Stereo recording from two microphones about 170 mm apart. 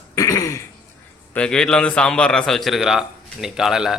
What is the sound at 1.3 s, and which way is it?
A man's voice, 5° left (ahead or behind).